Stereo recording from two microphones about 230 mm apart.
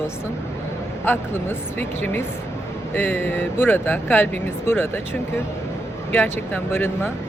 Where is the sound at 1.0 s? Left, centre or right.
Centre.